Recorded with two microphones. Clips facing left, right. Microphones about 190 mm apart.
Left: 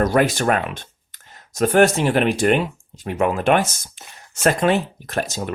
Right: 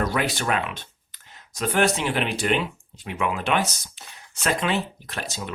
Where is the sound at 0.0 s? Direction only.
45° left (ahead or behind).